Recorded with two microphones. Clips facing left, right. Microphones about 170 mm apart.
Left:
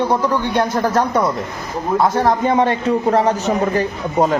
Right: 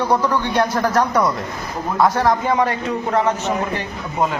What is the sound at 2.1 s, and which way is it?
A man's voice, 25° left (ahead or behind).